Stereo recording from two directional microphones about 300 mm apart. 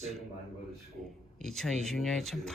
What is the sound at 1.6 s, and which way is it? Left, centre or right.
Speech, centre.